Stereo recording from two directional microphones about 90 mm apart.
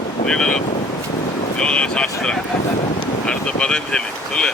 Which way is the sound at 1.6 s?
10° left (ahead or behind).